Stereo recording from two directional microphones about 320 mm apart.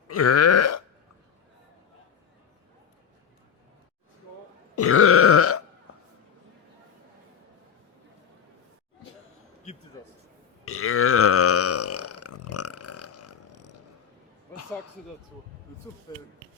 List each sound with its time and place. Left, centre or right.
0.1 s burping: left
4.7 s burping: left
10.7 s burping: left
16.1 s a sound: centre